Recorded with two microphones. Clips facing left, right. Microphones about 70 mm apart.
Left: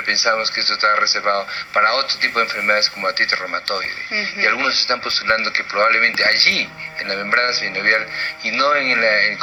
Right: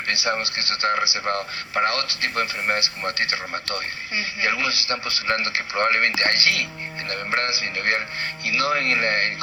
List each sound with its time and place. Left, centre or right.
0.1 s a man's voice: left